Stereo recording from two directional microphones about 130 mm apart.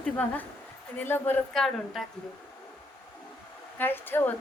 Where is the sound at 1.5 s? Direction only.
Centre (ahead or behind).